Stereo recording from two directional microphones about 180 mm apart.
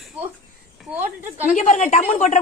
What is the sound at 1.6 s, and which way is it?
Speech, 40° left (ahead or behind).